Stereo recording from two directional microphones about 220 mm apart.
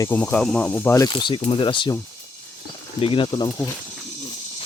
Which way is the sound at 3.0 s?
25° left (ahead or behind).